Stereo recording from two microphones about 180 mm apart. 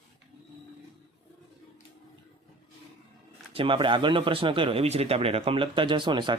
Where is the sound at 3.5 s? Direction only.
30° right (ahead or behind).